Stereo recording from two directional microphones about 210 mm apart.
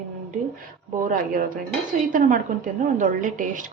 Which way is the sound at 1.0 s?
40° right (ahead or behind).